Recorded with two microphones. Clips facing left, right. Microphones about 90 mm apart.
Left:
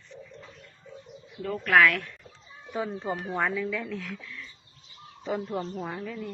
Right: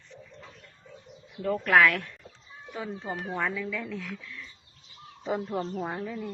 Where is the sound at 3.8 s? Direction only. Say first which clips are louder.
Left 1 dB; 10° right (ahead or behind).